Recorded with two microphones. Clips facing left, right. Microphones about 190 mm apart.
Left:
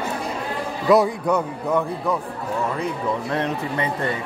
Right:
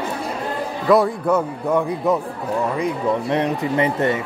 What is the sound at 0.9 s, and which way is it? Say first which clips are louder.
A man's voice: right 1 dB; centre (ahead or behind).